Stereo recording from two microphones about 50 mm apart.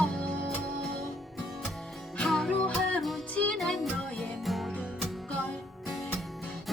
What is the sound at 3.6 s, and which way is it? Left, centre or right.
Music, centre.